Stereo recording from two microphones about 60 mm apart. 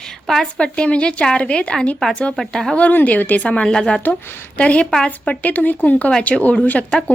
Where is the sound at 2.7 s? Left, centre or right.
Left.